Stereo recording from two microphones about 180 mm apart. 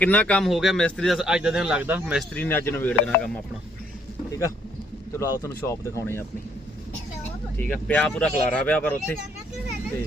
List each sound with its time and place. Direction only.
0.0 s speech: 5° left (ahead or behind); by 2.2 s 10° right (ahead or behind)
2.3 s speech: 10° left (ahead or behind)
4.3 s vehicle: 15° left (ahead or behind)
5.1 s speech: 15° left (ahead or behind)
7.5 s speech: 10° left (ahead or behind)